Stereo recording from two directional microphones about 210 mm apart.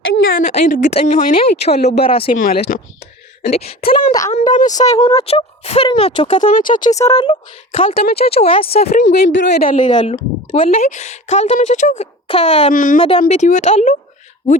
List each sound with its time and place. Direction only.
0.1 s speech: 40° left (ahead or behind)
2.3 s speech: 40° left (ahead or behind)
6.4 s speech: 40° left (ahead or behind)
6.9 s speech: 15° left (ahead or behind)
8.1 s speech: 50° left (ahead or behind)
8.4 s speech: 25° left (ahead or behind)
9.0 s speech: 60° left (ahead or behind); by 9.8 s 45° left (ahead or behind)
9.8 s speech: 20° left (ahead or behind); by 13.0 s 40° left (ahead or behind)
13.0 s speech: 25° left (ahead or behind)